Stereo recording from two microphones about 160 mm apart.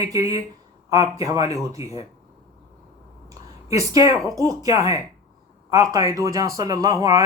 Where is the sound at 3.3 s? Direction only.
20° right (ahead or behind).